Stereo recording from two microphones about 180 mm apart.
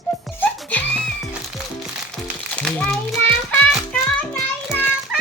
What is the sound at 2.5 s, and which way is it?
Speech, 5° left (ahead or behind).